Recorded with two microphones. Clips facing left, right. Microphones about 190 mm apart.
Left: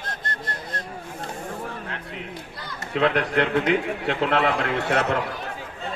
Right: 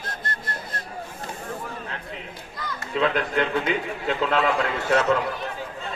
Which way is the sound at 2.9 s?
65° left (ahead or behind).